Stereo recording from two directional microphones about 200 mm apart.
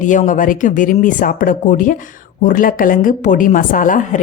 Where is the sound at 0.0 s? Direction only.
40° left (ahead or behind).